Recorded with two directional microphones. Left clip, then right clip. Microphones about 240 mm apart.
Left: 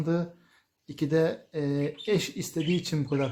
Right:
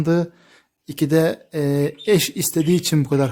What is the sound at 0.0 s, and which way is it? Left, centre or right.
Speech, right.